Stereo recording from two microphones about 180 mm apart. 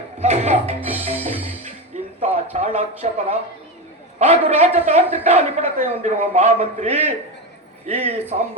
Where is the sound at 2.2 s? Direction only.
35° right (ahead or behind).